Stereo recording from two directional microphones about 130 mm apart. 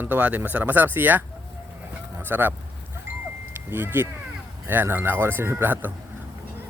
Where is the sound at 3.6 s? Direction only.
15° right (ahead or behind).